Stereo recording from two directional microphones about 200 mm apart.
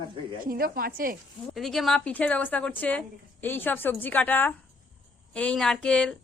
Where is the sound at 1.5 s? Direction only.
Centre (ahead or behind).